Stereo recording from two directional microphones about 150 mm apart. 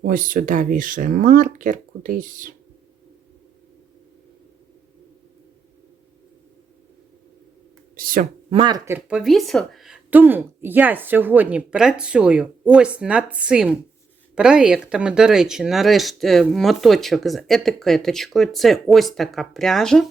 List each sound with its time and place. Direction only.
0.0 s speech: 65° right (ahead or behind)
7.9 s speech: 70° right (ahead or behind)
8.4 s speech: 35° right (ahead or behind)
8.9 s a woman's voice: 5° right (ahead or behind)